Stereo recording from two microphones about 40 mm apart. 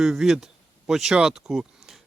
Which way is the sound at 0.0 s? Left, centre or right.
Centre.